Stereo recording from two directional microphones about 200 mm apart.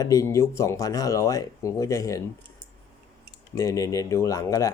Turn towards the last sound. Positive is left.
turn(degrees=15)  # may be behind; listen again after turning